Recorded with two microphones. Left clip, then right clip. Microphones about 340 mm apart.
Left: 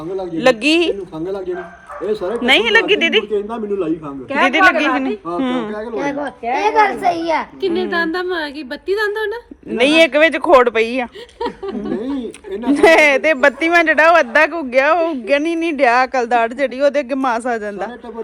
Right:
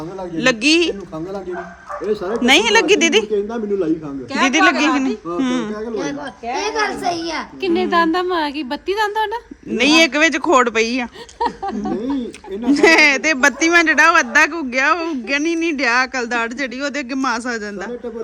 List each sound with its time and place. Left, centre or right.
0.4 s speech: centre
2.4 s speech: centre
3.3 s a child's voice: centre
5.4 s speech: centre
5.9 s a child's voice: centre
7.6 s speech: centre
9.7 s speech: centre
12.6 s speech: centre